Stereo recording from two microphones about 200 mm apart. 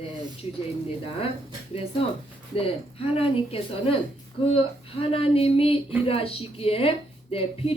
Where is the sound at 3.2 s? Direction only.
30° left (ahead or behind).